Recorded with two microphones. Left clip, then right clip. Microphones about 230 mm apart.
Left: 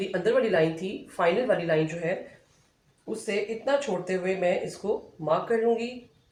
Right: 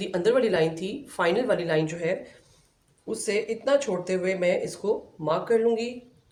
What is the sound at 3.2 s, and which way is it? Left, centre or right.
Speech, right.